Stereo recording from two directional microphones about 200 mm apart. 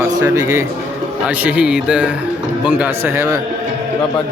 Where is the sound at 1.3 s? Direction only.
5° right (ahead or behind).